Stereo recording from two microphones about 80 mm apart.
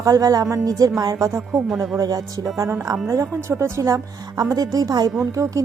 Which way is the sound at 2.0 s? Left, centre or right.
Right.